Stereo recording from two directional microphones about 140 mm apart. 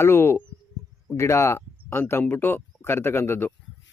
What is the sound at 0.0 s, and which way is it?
Speech, 15° left (ahead or behind).